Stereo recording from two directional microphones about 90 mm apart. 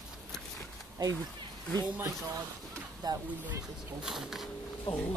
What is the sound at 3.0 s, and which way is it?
Speech, 50° right (ahead or behind).